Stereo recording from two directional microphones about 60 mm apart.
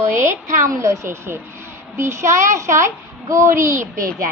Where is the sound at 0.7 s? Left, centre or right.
Right.